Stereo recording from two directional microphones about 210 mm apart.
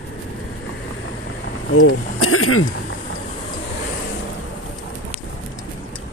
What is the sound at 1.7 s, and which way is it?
Speech, 85° left.